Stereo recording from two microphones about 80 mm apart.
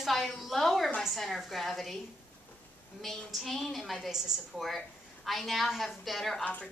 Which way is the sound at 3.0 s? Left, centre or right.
Centre.